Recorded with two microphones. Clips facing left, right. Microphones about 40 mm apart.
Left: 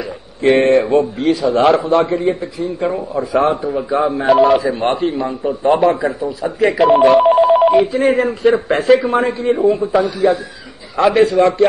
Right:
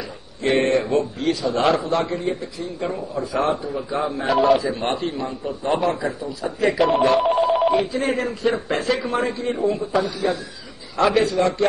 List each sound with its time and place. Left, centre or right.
0.4 s a man's voice: centre
4.3 s speech: centre
4.6 s a man's voice: centre
11.2 s a man's voice: centre